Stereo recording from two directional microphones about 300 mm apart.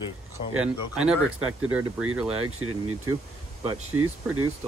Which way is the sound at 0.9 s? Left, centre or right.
Centre.